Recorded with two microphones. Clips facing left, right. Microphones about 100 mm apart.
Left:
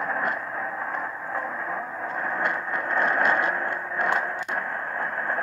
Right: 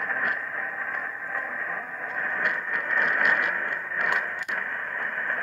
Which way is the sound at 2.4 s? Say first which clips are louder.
Left 2 dB; 30° left (ahead or behind).